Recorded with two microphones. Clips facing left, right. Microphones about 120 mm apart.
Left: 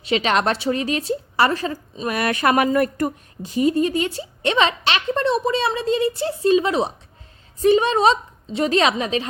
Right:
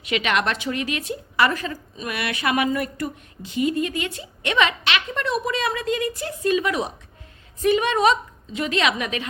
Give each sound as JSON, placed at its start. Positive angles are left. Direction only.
{"t": 0.0, "sound": "a woman's voice", "side_deg": 30}